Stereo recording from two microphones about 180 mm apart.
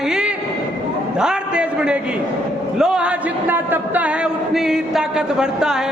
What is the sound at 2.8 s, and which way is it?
Speech, 5° right (ahead or behind).